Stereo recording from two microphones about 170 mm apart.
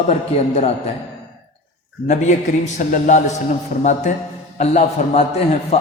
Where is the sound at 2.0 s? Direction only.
45° left (ahead or behind).